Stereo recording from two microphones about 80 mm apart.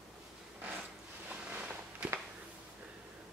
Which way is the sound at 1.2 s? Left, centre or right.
Centre.